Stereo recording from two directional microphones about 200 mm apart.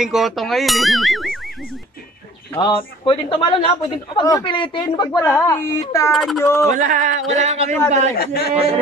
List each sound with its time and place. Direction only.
0.0 s speech: centre (ahead or behind)
2.5 s a man's voice: 25° left (ahead or behind)
6.1 s speech: centre (ahead or behind)
6.4 s speech: 15° left (ahead or behind)
6.7 s a man's voice: 40° right (ahead or behind)
8.2 s speech: 50° left (ahead or behind)